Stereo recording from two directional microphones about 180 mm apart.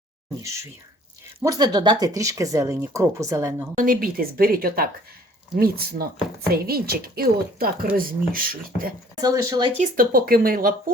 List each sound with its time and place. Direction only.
0.4 s speech: 15° right (ahead or behind)
3.8 s speech: 50° right (ahead or behind)
9.2 s speech: 20° right (ahead or behind)
9.7 s speech: 45° right (ahead or behind)